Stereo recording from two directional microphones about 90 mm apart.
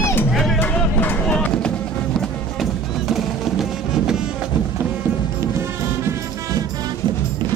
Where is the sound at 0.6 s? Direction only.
20° left (ahead or behind).